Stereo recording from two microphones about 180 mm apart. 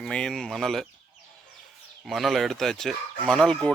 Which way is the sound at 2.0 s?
Centre (ahead or behind).